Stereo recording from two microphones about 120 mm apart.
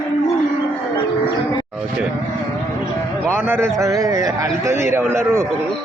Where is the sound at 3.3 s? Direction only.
20° right (ahead or behind).